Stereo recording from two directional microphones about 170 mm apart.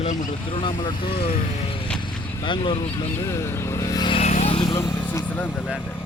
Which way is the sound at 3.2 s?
15° left (ahead or behind).